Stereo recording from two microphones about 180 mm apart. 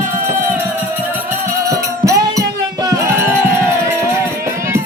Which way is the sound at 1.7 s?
20° right (ahead or behind).